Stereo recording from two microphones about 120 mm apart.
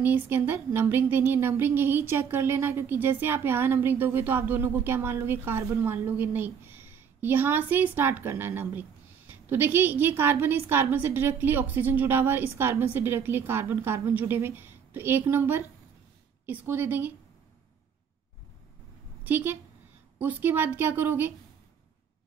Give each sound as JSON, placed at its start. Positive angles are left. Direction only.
{"t": 0.0, "sound": "speech", "side_deg": -15}
{"t": 19.2, "sound": "speech", "side_deg": -15}